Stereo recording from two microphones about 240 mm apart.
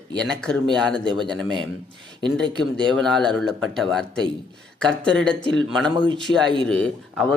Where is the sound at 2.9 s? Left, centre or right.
Centre.